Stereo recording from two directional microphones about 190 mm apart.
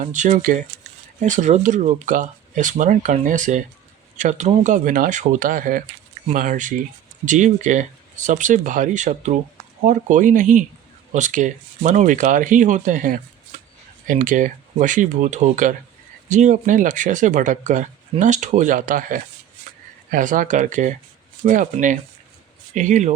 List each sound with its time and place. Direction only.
0.0 s speech: 40° right (ahead or behind)